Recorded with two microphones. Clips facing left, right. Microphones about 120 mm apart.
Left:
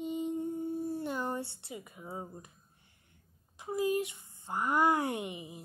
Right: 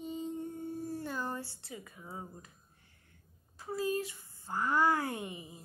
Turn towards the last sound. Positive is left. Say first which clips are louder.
# left 3 dB
turn(degrees=20)  # may be behind; listen again after turning